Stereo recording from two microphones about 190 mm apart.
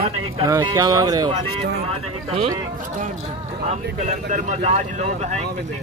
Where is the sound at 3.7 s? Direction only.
40° right (ahead or behind).